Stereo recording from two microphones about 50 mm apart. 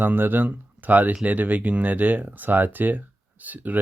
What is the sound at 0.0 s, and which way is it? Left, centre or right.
Speech, right.